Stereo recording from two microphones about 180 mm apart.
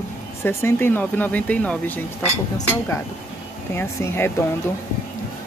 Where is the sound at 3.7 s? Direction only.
15° left (ahead or behind).